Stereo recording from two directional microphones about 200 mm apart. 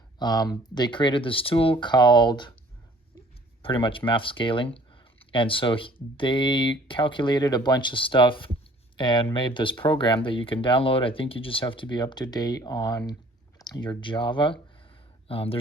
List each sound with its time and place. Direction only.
0.2 s speech: 20° left (ahead or behind)
3.6 s speech: 25° left (ahead or behind)